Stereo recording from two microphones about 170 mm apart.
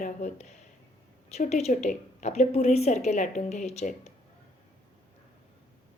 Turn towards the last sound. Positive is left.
turn(degrees=40)  # may be behind; listen again after turning